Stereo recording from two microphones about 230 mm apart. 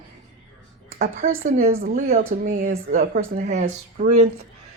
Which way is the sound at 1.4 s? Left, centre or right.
Right.